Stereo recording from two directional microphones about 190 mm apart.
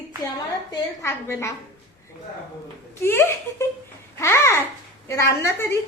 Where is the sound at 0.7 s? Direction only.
15° left (ahead or behind).